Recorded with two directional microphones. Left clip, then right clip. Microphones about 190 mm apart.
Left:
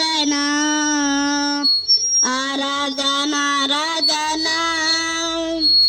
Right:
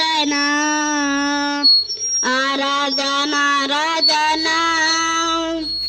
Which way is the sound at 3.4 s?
30° right (ahead or behind).